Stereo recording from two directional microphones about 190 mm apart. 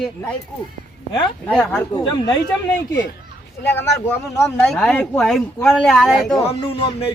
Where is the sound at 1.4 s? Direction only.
5° left (ahead or behind).